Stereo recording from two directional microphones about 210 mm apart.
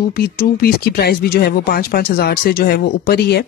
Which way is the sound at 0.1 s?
45° left (ahead or behind).